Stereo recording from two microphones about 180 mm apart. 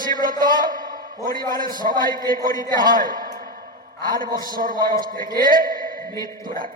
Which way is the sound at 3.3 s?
55° right (ahead or behind).